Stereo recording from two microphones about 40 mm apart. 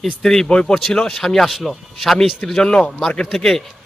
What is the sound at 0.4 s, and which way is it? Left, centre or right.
Speech, left.